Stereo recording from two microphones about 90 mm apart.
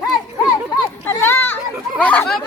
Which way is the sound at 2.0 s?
15° left (ahead or behind).